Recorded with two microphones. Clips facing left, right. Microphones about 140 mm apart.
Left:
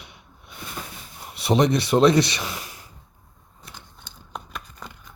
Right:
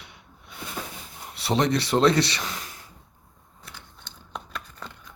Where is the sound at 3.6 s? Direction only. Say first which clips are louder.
Left 1 dB; 15° left (ahead or behind).